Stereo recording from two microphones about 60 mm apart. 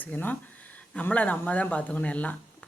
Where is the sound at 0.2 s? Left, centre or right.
Left.